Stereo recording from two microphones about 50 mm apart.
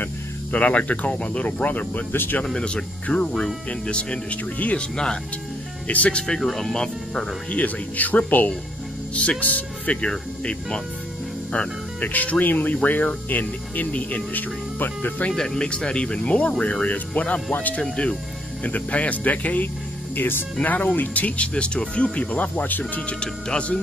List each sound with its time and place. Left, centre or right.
0.0 s speech: left
2.1 s speech: left
2.4 s speech: centre
4.6 s speech: left
4.9 s speech: centre
7.5 s speech: left
10.0 s speech: centre
12.0 s speech: left
15.3 s speech: centre; by 19.7 s left
20.2 s speech: left
23.0 s speech: centre